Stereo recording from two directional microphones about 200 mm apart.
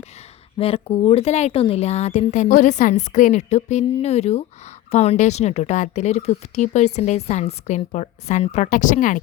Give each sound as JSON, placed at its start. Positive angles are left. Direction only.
{"t": 0.6, "sound": "a woman's voice", "side_deg": 30}